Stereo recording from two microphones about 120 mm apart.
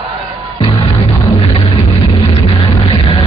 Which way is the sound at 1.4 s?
50° left (ahead or behind).